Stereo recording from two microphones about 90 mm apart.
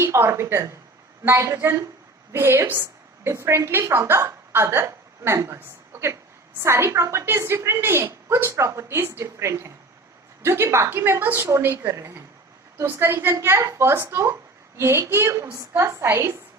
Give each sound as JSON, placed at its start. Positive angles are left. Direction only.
{"t": 0.0, "sound": "a woman's voice", "side_deg": -30}